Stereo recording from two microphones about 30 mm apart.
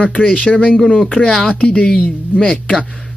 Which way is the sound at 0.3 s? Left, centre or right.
Left.